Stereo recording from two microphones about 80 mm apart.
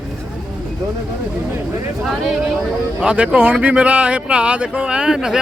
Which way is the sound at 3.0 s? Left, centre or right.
Centre.